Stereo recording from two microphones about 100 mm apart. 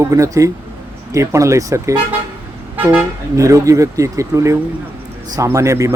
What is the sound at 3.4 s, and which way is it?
Speech, 35° right (ahead or behind).